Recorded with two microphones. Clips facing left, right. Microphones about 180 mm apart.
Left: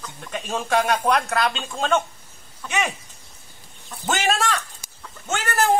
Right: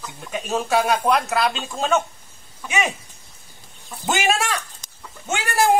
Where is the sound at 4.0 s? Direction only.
10° right (ahead or behind).